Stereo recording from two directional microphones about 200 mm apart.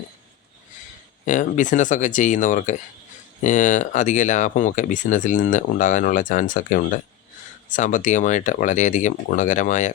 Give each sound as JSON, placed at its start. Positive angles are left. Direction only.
{"t": 1.2, "sound": "speech", "side_deg": 40}